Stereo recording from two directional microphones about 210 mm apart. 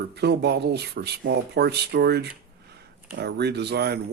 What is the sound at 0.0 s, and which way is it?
Speech, 50° right (ahead or behind).